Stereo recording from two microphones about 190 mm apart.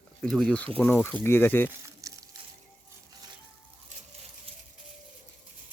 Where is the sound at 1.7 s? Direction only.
15° right (ahead or behind).